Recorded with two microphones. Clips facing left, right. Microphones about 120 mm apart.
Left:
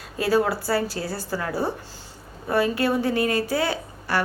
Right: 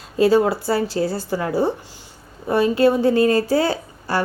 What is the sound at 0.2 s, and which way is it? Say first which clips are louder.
A woman's voice: right 6 dB; 25° right (ahead or behind).